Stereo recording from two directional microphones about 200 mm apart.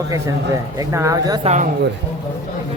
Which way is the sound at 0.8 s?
15° right (ahead or behind).